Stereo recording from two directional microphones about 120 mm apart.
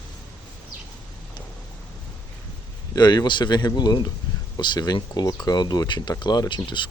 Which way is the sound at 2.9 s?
35° left (ahead or behind).